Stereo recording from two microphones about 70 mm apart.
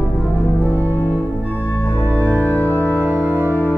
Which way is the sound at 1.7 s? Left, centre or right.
Left.